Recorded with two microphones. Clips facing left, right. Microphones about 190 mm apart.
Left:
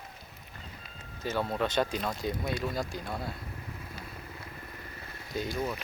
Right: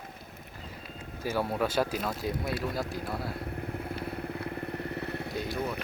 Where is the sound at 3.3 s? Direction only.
60° right (ahead or behind).